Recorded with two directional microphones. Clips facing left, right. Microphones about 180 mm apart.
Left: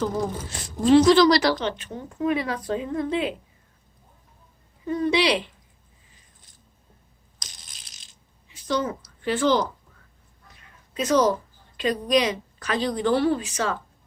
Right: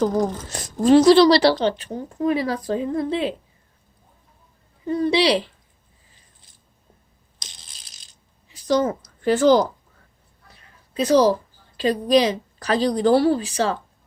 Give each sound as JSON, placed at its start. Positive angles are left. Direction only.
{"t": 0.5, "sound": "a woman's voice", "side_deg": -40}
{"t": 4.9, "sound": "a woman's voice", "side_deg": -35}
{"t": 8.5, "sound": "a sound", "side_deg": -40}
{"t": 9.2, "sound": "a woman's voice", "side_deg": -40}
{"t": 10.5, "sound": "a sound", "side_deg": -35}
{"t": 11.8, "sound": "a woman's voice", "side_deg": -30}